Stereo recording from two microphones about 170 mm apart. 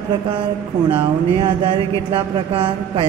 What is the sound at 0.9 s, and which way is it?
A woman's voice, 30° right (ahead or behind).